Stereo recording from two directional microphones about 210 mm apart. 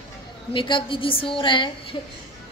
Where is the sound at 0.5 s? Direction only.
25° left (ahead or behind).